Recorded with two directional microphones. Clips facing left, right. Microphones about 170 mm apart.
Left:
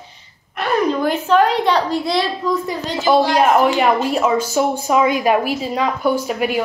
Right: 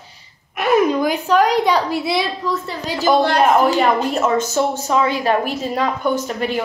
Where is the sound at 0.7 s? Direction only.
5° right (ahead or behind).